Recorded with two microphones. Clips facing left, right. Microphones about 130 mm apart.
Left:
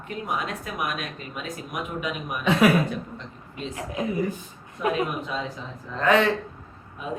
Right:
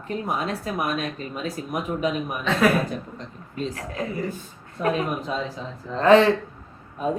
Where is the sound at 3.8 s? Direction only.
15° left (ahead or behind).